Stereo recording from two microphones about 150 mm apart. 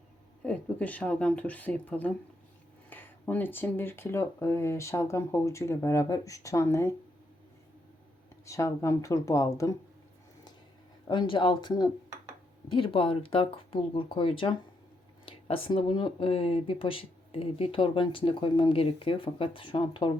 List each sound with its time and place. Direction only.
0.4 s speech: 10° left (ahead or behind)
8.4 s speech: 20° left (ahead or behind)
11.1 s speech: 30° left (ahead or behind)